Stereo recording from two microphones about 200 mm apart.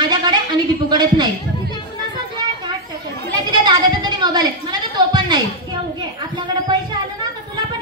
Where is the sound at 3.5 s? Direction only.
20° right (ahead or behind).